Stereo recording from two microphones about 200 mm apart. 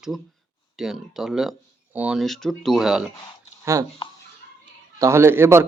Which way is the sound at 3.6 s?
15° right (ahead or behind).